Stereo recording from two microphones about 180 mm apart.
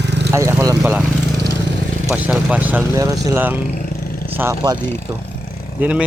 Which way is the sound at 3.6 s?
50° left (ahead or behind).